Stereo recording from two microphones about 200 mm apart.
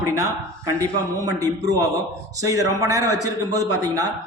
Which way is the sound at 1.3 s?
15° right (ahead or behind).